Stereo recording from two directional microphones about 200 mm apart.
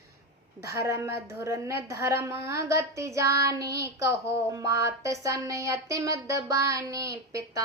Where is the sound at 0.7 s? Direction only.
15° right (ahead or behind).